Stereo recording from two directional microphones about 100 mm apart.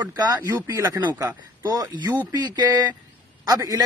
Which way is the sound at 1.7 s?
45° right (ahead or behind).